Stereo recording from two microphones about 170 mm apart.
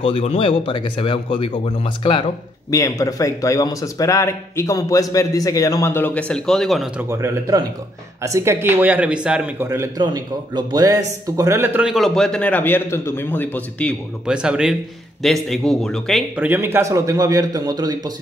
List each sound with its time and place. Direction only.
0.0 s speech: 35° left (ahead or behind)
2.7 s a man's voice: 20° left (ahead or behind); by 6.9 s centre (ahead or behind)
7.0 s speech: 15° right (ahead or behind); by 13.9 s 10° left (ahead or behind)
14.2 s a man's voice: 5° right (ahead or behind)
16.3 s a man's voice: 10° right (ahead or behind)